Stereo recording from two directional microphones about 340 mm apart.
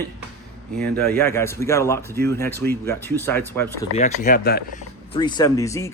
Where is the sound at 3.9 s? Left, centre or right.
Left.